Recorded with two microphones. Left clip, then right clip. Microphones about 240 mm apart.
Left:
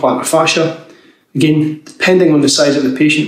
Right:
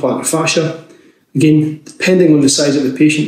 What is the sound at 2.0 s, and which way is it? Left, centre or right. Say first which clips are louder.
Speech: even; centre.